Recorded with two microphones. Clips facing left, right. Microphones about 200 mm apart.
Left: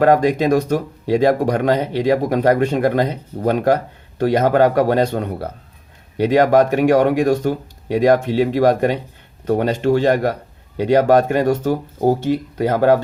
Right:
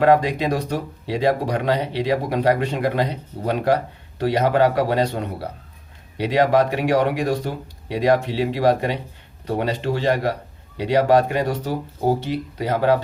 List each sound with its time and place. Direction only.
0.0 s speech: 45° left (ahead or behind)